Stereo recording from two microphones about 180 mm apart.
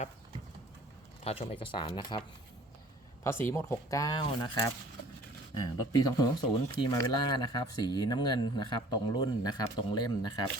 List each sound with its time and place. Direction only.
1.2 s speech: 35° left (ahead or behind)
3.2 s speech: 15° left (ahead or behind)
5.9 s speech: 20° left (ahead or behind)